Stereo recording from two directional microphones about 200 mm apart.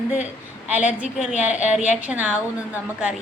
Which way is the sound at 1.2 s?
35° left (ahead or behind).